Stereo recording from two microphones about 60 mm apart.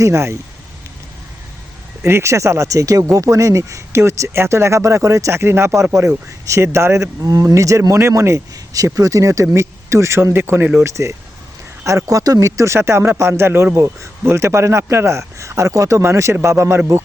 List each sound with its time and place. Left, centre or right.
0.0 s speech: right
2.0 s speech: right
8.7 s speech: right
9.6 s speech: right
10.3 s speech: right
10.8 s speech: right